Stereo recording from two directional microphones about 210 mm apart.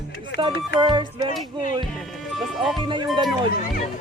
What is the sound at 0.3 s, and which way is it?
Speech, 20° right (ahead or behind).